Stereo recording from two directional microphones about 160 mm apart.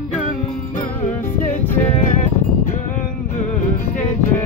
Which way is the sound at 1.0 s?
50° left (ahead or behind).